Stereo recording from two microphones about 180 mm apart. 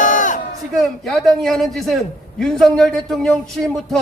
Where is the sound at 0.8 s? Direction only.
Centre (ahead or behind).